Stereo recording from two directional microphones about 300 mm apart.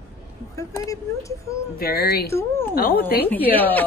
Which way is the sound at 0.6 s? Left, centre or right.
Centre.